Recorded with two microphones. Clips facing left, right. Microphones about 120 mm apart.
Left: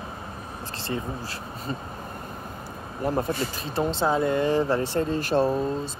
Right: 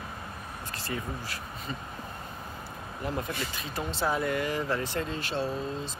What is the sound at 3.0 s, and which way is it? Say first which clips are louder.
Speech: left 8 dB; 35° left (ahead or behind).